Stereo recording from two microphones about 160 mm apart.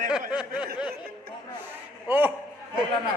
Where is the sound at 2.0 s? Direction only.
10° right (ahead or behind).